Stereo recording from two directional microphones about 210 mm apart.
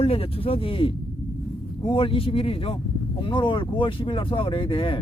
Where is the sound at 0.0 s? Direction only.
30° left (ahead or behind).